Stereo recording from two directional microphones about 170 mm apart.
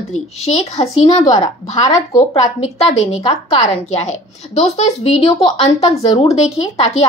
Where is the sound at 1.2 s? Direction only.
20° left (ahead or behind).